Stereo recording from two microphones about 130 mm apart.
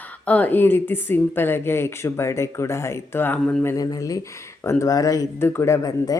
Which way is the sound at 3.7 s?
30° left (ahead or behind).